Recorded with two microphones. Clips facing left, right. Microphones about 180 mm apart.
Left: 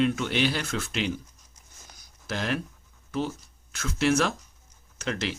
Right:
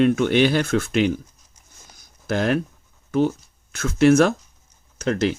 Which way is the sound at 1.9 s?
50° right (ahead or behind).